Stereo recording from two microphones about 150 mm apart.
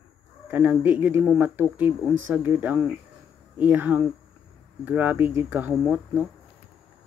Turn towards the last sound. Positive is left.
turn(degrees=-10)  # may be behind; listen again after turning